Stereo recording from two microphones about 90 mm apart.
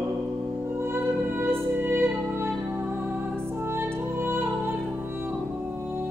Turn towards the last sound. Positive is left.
turn(degrees=-25)  # may be behind; listen again after turning